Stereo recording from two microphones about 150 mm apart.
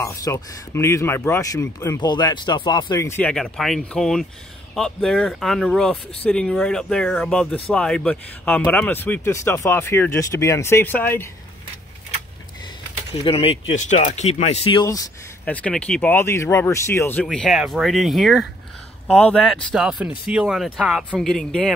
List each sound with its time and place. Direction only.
0.0 s speech: 20° left (ahead or behind)
13.1 s speech: 40° left (ahead or behind)
15.4 s speech: 10° left (ahead or behind)